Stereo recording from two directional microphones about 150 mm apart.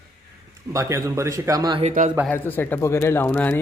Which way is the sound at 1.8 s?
55° right (ahead or behind).